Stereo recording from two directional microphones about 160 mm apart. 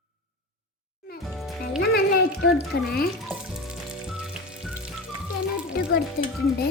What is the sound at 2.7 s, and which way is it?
Speech, 90° left.